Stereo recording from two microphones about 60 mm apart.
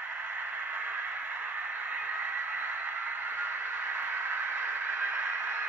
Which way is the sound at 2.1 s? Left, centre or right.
Right.